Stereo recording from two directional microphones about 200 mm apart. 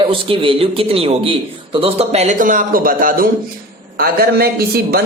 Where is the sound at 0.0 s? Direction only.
25° right (ahead or behind).